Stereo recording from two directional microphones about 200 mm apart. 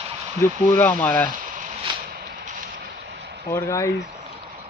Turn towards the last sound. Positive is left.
turn(degrees=15)  # may be behind; listen again after turning